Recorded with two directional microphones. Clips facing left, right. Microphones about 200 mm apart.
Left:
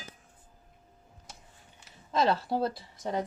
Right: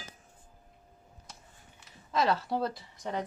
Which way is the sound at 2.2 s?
30° left (ahead or behind).